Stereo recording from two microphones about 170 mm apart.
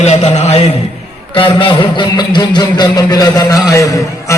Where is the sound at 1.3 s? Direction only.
30° left (ahead or behind).